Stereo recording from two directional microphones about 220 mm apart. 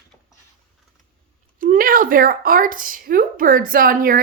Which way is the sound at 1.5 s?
40° right (ahead or behind).